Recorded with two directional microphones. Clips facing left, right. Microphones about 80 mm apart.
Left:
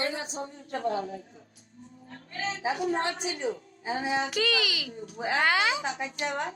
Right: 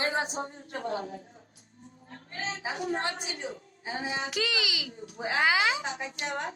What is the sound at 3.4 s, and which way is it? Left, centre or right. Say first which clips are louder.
Speech: left 6 dB; left.